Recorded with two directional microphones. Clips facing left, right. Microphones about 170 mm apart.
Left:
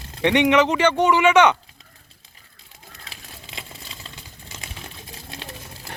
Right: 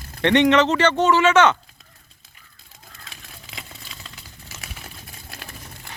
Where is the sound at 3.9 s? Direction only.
30° left (ahead or behind).